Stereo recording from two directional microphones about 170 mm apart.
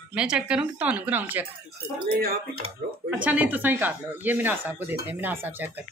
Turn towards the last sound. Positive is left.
turn(degrees=-10)  # may be behind; listen again after turning